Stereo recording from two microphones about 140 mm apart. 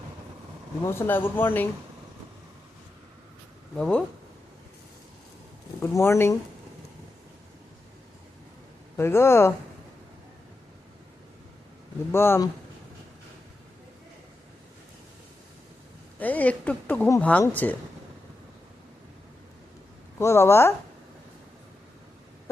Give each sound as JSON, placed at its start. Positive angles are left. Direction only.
{"t": 0.9, "sound": "speech", "side_deg": 15}
{"t": 3.8, "sound": "speech", "side_deg": 5}
{"t": 5.8, "sound": "speech", "side_deg": 20}
{"t": 9.0, "sound": "speech", "side_deg": 20}
{"t": 12.1, "sound": "speech", "side_deg": 15}
{"t": 16.1, "sound": "a woman's voice", "side_deg": 10}
{"t": 20.1, "sound": "speech", "side_deg": 20}